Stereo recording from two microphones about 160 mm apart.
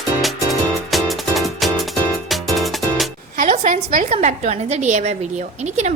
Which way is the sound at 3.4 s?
50° right (ahead or behind).